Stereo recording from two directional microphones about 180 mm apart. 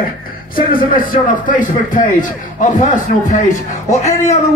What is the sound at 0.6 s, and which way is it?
A man's voice, 50° left (ahead or behind).